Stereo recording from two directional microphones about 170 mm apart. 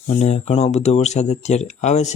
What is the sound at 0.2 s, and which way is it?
Speech, 40° left (ahead or behind).